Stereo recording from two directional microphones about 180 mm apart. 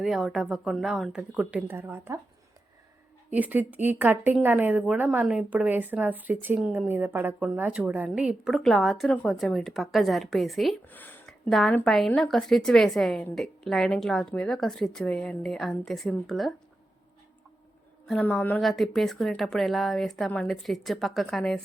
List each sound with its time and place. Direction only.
0.0 s speech: centre (ahead or behind)
3.2 s speech: 10° right (ahead or behind)
18.0 s speech: 5° left (ahead or behind)